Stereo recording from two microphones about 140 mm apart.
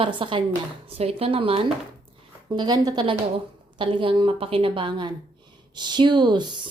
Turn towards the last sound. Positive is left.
turn(degrees=-35)  # may be behind; listen again after turning